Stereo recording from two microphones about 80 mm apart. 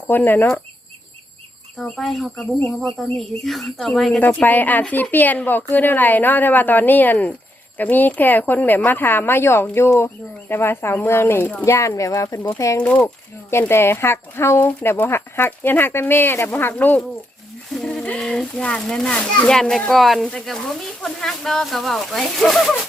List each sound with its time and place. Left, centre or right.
0.1 s a woman's voice: left
1.8 s speech: centre
4.2 s a woman's voice: left
17.7 s speech: centre